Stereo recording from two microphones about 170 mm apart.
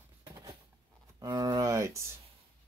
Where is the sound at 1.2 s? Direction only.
20° right (ahead or behind).